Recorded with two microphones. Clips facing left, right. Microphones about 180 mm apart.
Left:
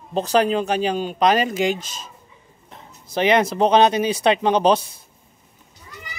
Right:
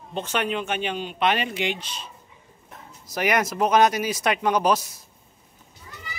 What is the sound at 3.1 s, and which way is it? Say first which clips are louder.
Speech: left 6 dB; 25° left (ahead or behind).